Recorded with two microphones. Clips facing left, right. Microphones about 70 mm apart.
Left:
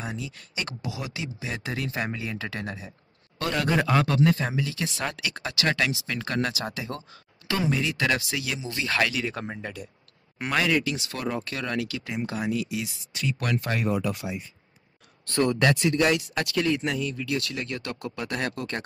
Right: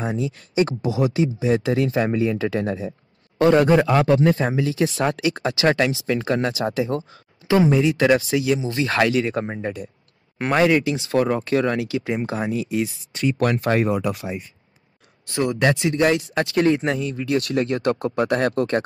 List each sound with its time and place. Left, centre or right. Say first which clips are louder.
0.0 s speech: right 10 dB; right
8.5 s speech: right 6 dB; right
15.2 s speech: right 2 dB; centre; by 18.8 s right